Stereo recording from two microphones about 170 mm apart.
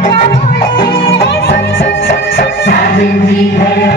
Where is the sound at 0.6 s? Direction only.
30° left (ahead or behind).